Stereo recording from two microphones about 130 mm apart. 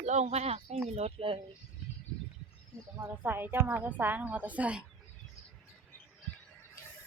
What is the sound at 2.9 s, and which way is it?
A woman's voice, 15° right (ahead or behind).